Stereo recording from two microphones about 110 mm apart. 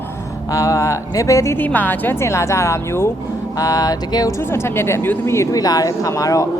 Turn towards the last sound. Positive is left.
turn(degrees=30)  # may be behind; listen again after turning